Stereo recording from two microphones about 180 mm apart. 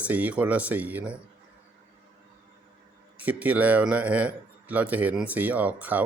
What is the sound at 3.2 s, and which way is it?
Speech, 10° right (ahead or behind).